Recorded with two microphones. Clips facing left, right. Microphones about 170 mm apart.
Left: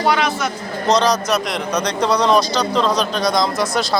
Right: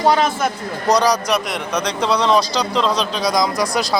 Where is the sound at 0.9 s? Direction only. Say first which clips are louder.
Even; 10° right (ahead or behind).